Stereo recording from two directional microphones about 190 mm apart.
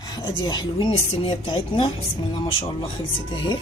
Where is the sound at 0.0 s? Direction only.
20° left (ahead or behind).